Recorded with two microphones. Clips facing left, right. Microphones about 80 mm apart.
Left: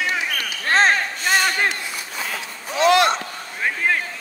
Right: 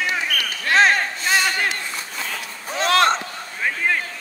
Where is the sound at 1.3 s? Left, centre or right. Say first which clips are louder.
Left 1 dB; left.